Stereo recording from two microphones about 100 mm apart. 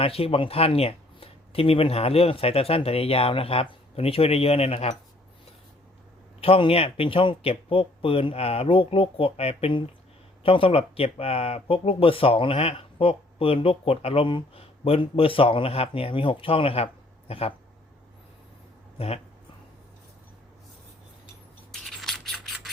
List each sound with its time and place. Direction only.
0.0 s speech: 75° left (ahead or behind)
6.4 s speech: 75° left (ahead or behind)
18.9 s speech: 90° left
21.7 s a sound: 5° left (ahead or behind)